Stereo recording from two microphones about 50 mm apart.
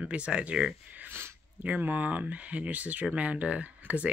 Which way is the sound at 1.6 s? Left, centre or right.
Right.